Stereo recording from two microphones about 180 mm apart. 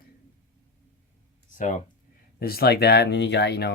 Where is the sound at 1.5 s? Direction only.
45° left (ahead or behind).